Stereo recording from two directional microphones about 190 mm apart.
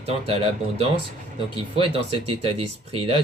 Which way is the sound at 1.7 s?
30° right (ahead or behind).